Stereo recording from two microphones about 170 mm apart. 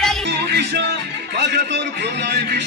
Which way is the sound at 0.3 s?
80° right.